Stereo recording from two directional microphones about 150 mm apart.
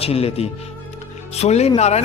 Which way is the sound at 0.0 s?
40° left (ahead or behind).